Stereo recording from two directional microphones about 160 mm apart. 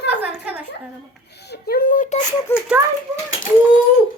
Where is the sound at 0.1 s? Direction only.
10° right (ahead or behind).